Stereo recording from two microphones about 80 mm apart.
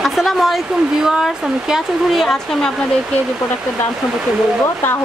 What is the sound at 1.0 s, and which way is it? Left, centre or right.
Speech, centre.